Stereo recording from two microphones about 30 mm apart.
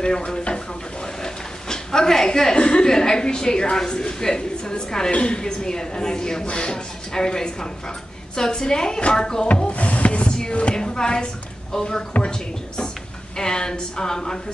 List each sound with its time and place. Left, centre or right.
0.0 s speech: left
1.2 s a sound: left
2.5 s speech: left
2.8 s a woman's voice: left
5.1 s speech: left
5.4 s a woman's voice: left
9.7 s speech: left
10.7 s a woman's voice: left